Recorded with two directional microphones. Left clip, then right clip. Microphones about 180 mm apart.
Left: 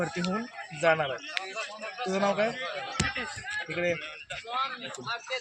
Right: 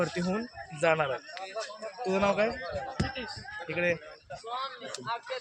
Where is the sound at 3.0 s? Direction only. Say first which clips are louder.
Left 8 dB; 35° right (ahead or behind).